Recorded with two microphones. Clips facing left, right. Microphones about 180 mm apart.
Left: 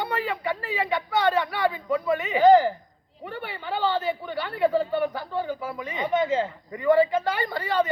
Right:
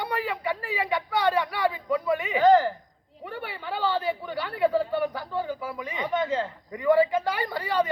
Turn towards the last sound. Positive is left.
turn(degrees=-10)  # may be behind; listen again after turning